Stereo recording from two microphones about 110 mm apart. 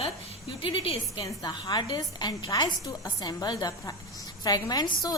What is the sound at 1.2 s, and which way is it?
A woman's voice, 40° left (ahead or behind).